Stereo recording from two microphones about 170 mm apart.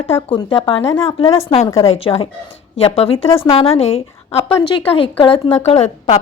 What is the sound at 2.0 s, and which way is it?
A woman's voice, 35° left (ahead or behind).